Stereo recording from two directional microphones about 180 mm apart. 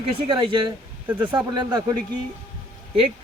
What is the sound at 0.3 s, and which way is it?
A man's voice, 25° right (ahead or behind).